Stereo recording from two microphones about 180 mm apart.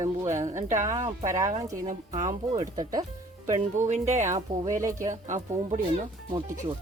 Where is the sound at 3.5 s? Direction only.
40° right (ahead or behind).